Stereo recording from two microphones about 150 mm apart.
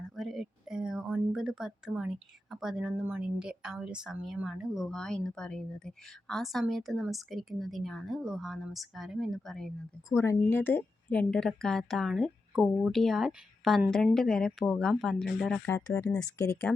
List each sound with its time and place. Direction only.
0.2 s speech: centre (ahead or behind)
10.2 s speech: 15° left (ahead or behind)
16.1 s speech: 20° left (ahead or behind)